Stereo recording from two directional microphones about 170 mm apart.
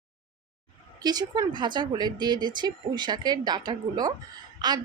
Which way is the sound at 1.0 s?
25° right (ahead or behind).